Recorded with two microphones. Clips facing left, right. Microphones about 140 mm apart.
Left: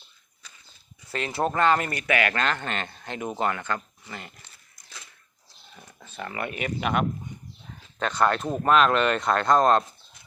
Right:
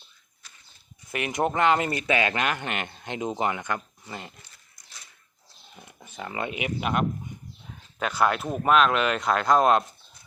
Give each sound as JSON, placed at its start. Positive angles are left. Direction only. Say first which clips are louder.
{"t": 1.1, "sound": "speech", "louder": "even", "side_deg": -15}
{"t": 5.7, "sound": "a sound", "louder": "left 1 dB", "side_deg": -15}
{"t": 6.7, "sound": "speech", "louder": "left 1 dB", "side_deg": 0}